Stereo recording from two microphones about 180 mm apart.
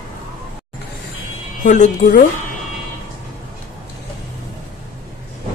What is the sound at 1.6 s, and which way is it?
Speech, 45° left (ahead or behind).